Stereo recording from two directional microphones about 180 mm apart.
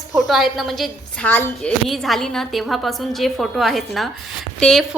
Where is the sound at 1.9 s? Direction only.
Centre (ahead or behind).